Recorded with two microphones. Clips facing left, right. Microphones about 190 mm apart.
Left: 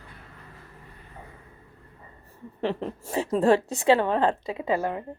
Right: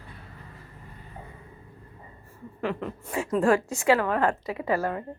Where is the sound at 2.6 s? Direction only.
30° left (ahead or behind).